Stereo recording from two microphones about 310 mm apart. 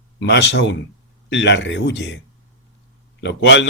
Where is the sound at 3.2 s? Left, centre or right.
Left.